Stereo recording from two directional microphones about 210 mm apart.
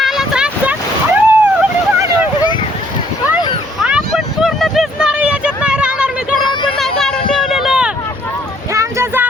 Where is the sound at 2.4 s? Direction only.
20° left (ahead or behind).